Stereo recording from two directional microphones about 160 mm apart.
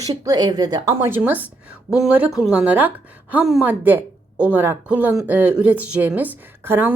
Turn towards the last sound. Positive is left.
turn(degrees=-15)  # may be behind; listen again after turning